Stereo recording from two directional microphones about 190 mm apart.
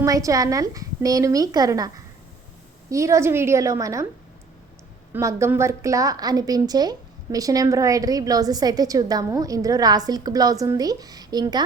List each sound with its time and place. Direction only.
0.0 s a woman's voice: 15° right (ahead or behind)
2.9 s a woman's voice: 15° right (ahead or behind)
5.1 s a woman's voice: 10° right (ahead or behind)